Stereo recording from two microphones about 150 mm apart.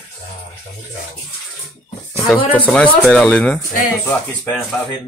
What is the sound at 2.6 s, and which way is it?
Speech, 5° left (ahead or behind).